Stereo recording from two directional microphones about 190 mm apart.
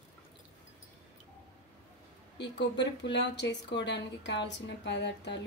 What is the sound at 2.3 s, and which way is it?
A woman's voice, 65° left (ahead or behind).